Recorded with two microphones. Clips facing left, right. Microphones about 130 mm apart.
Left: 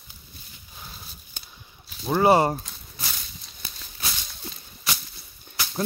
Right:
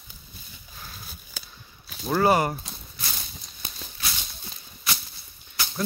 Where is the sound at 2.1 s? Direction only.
25° left (ahead or behind).